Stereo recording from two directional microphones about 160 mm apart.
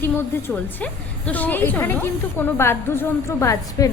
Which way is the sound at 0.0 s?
10° left (ahead or behind).